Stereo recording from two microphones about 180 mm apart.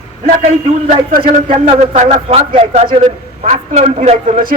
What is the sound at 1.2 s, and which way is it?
A man's voice, 30° right (ahead or behind).